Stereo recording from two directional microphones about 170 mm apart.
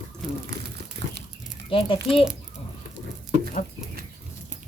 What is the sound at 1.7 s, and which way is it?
Speech, 30° left (ahead or behind).